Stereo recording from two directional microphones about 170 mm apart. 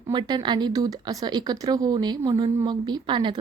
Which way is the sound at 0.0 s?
25° right (ahead or behind).